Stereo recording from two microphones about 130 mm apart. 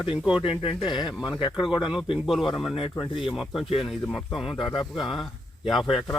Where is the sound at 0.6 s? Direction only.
40° left (ahead or behind).